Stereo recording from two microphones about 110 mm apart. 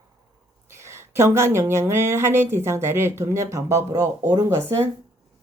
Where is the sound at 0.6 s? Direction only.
25° right (ahead or behind).